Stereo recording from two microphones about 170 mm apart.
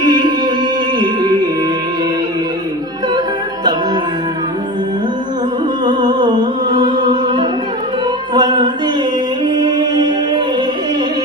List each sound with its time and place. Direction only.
0.0 s music: 25° right (ahead or behind)
5.8 s music: 25° right (ahead or behind)